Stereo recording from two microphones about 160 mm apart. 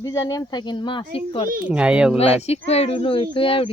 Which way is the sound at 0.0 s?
20° left (ahead or behind).